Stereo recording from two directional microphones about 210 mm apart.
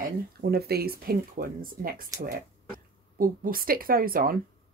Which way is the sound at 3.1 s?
40° right (ahead or behind).